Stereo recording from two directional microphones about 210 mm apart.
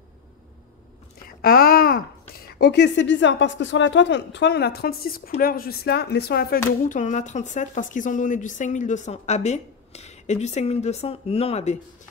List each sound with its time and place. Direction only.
1.4 s a sound: 45° left (ahead or behind)
2.6 s speech: 55° left (ahead or behind)
6.9 s a woman's voice: 35° left (ahead or behind)